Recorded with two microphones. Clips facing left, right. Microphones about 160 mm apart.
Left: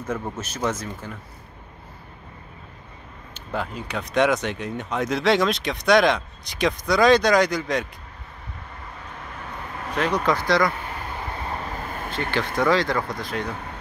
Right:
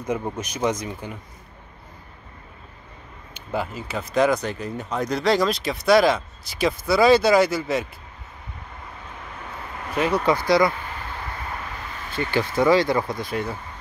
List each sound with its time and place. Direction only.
0.0 s speech: 15° right (ahead or behind)
3.3 s speech: 5° right (ahead or behind)
9.9 s speech: 10° right (ahead or behind)
11.4 s vehicle: 35° left (ahead or behind); by 12.4 s 55° left (ahead or behind)
12.5 s speech: 10° right (ahead or behind)